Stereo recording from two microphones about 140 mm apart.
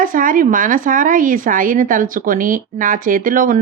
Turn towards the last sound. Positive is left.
turn(degrees=-75)  # may be behind; listen again after turning